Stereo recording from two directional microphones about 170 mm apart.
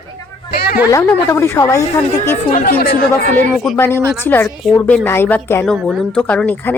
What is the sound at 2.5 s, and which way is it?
Speech, 60° left (ahead or behind).